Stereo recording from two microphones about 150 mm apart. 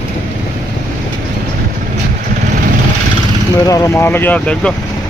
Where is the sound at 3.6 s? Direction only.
20° left (ahead or behind).